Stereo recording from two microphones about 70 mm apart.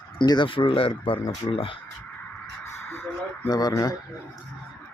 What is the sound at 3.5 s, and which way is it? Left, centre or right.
Speech, left.